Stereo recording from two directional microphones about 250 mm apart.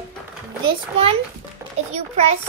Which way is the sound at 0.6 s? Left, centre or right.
Right.